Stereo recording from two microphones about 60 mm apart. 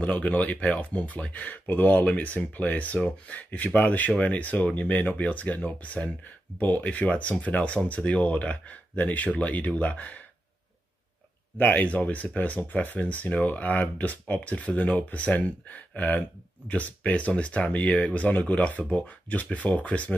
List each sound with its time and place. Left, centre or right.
0.0 s speech: left
11.5 s speech: left